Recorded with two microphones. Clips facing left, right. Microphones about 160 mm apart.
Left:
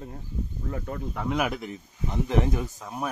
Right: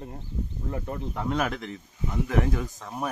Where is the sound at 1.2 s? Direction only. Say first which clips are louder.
Left 1 dB; 5° left (ahead or behind); by 2.6 s 20° left (ahead or behind).